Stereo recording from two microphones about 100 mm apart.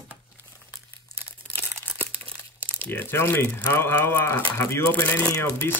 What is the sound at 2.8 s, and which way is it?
Speech, 25° left (ahead or behind).